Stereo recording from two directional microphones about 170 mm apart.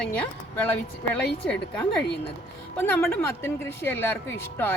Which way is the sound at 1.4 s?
5° left (ahead or behind).